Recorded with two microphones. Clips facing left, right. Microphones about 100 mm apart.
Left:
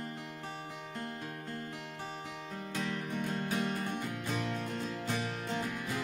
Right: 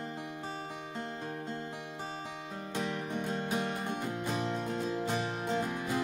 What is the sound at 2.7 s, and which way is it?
Music, 25° right (ahead or behind).